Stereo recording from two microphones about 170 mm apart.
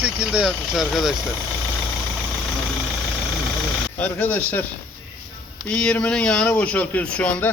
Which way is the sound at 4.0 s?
10° left (ahead or behind).